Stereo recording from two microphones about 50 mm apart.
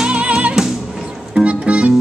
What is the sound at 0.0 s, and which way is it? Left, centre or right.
Music, right.